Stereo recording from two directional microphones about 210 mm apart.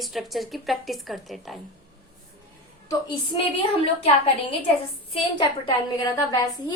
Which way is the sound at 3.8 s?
30° left (ahead or behind).